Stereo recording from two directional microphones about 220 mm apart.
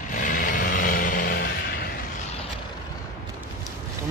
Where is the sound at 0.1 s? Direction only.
35° left (ahead or behind).